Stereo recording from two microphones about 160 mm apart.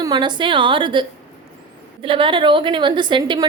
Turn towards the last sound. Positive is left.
turn(degrees=-30)  # may be behind; listen again after turning